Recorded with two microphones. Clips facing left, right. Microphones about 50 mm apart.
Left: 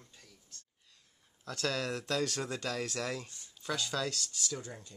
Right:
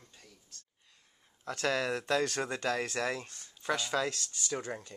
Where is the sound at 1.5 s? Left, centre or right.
Right.